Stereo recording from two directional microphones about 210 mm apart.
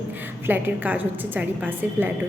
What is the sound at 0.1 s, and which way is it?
A woman's voice, 10° right (ahead or behind).